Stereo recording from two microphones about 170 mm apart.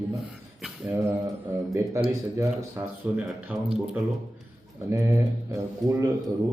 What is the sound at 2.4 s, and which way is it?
Speech, 15° right (ahead or behind).